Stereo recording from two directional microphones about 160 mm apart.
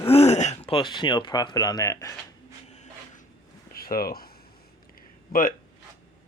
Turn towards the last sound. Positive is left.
turn(degrees=55)  # may be behind; listen again after turning